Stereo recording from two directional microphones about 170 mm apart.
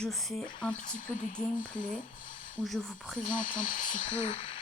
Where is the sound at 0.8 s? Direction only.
50° left (ahead or behind).